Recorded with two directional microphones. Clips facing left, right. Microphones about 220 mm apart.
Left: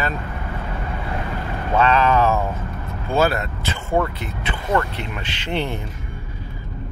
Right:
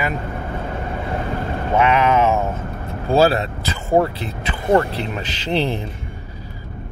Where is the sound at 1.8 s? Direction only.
20° right (ahead or behind).